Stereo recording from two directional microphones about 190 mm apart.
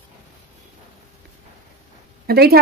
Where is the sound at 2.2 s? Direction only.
55° right (ahead or behind).